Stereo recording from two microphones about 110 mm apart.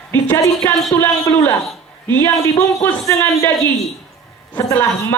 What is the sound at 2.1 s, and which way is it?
A man's voice, 20° left (ahead or behind).